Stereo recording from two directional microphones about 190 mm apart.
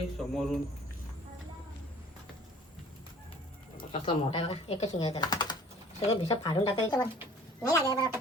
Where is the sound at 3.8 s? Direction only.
30° left (ahead or behind).